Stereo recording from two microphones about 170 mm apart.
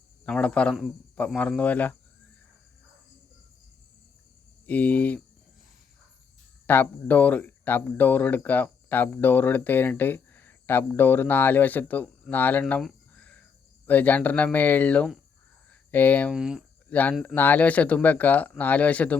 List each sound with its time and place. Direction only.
0.3 s speech: 5° left (ahead or behind)
4.6 s speech: 10° left (ahead or behind)
6.7 s speech: 10° left (ahead or behind)
12.8 s a sound: 5° left (ahead or behind)
13.8 s speech: 10° left (ahead or behind)
16.3 s speech: 5° right (ahead or behind)
16.9 s speech: 10° left (ahead or behind)